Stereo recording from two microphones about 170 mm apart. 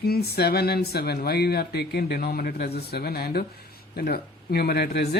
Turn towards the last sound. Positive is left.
turn(degrees=70)  # may be behind; listen again after turning